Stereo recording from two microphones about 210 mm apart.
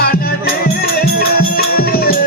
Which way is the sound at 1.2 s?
45° left (ahead or behind).